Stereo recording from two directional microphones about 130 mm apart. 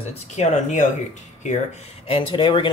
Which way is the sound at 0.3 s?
65° left (ahead or behind).